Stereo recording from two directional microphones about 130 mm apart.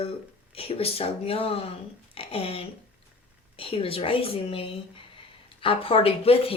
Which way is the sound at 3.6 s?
45° left (ahead or behind).